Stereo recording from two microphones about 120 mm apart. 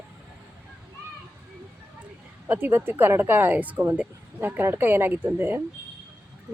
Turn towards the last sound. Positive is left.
turn(degrees=-15)  # may be behind; listen again after turning